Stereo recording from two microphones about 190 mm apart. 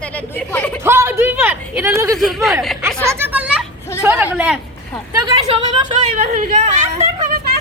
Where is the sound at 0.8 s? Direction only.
15° right (ahead or behind).